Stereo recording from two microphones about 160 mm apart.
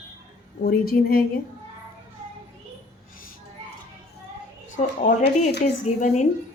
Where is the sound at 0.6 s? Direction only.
70° left (ahead or behind).